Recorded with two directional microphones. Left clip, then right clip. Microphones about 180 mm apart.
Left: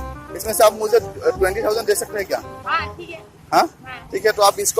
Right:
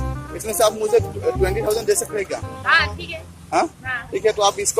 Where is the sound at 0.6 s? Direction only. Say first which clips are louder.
Left 3 dB; centre (ahead or behind).